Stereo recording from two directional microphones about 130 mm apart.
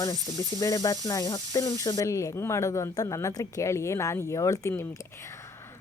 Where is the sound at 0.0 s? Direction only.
30° left (ahead or behind).